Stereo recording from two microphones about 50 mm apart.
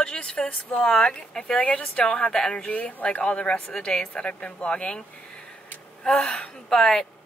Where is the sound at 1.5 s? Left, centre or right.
Left.